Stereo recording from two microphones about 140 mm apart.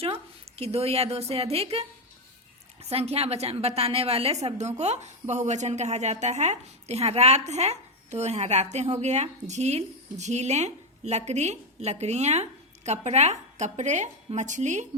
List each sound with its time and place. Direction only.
0.0 s a woman's voice: 45° right (ahead or behind)
2.9 s a woman's voice: 45° right (ahead or behind)